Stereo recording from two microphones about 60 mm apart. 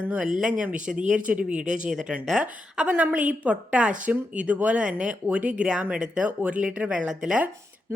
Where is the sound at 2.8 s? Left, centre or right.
Right.